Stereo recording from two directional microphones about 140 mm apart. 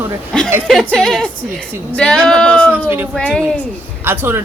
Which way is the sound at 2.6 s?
15° right (ahead or behind).